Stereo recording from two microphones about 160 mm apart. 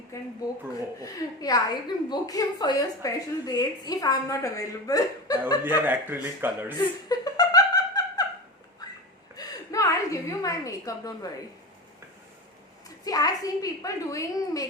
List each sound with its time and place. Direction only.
1.4 s a woman's voice: 20° left (ahead or behind)
5.6 s a man's voice: 10° right (ahead or behind)
7.1 s a sound: 25° left (ahead or behind)
9.3 s a woman's voice: 20° left (ahead or behind)
13.1 s a woman's voice: 25° left (ahead or behind)